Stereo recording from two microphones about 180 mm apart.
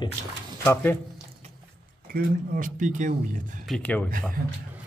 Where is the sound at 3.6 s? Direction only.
5° left (ahead or behind).